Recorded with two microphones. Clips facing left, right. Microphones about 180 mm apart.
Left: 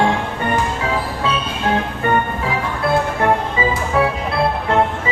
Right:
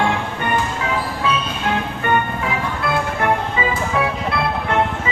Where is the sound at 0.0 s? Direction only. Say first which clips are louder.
Left 2 dB; 35° left (ahead or behind).